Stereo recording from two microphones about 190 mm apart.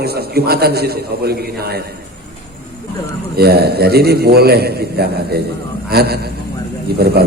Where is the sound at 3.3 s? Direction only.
55° right (ahead or behind).